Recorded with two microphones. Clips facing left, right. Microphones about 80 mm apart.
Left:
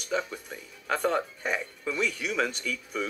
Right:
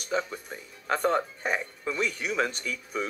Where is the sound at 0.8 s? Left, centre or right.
Centre.